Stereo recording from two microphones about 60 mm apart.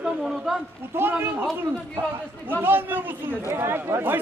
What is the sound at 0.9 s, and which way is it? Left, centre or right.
A man's voice, right.